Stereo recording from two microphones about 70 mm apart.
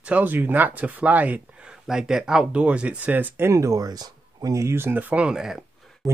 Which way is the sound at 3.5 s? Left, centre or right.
Right.